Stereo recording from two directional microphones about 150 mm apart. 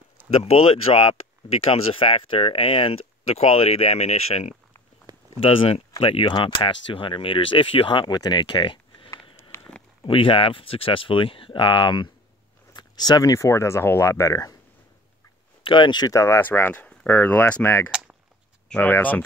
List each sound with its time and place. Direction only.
0.3 s speech: 40° left (ahead or behind)
5.1 s a sound: 25° right (ahead or behind)
5.4 s speech: 35° left (ahead or behind); by 14.5 s 20° left (ahead or behind)
15.6 s speech: 35° left (ahead or behind); by 19.2 s 10° left (ahead or behind)